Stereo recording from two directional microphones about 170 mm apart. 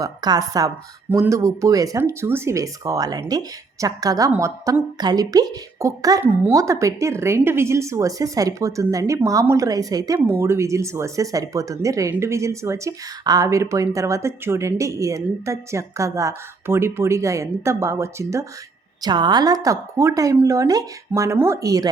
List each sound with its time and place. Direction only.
0.0 s a woman's voice: 25° right (ahead or behind)